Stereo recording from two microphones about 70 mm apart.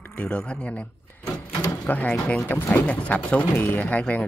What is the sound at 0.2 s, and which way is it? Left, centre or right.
Speech, centre.